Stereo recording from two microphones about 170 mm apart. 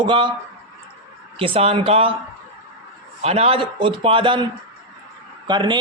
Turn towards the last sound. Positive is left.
turn(degrees=-25)  # may be behind; listen again after turning